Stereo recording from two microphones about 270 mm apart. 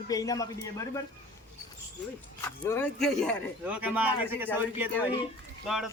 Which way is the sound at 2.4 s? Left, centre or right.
Centre.